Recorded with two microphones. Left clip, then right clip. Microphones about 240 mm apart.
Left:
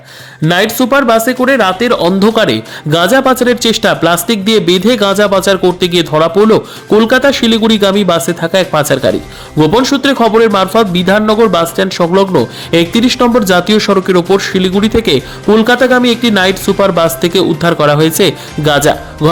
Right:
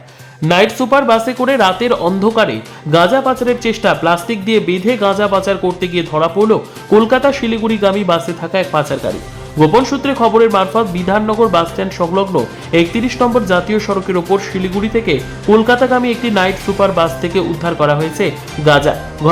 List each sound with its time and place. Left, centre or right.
0.4 s speech: centre